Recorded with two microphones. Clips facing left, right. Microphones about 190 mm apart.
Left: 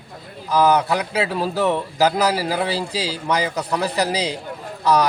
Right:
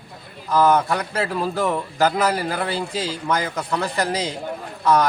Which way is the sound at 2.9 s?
70° left (ahead or behind).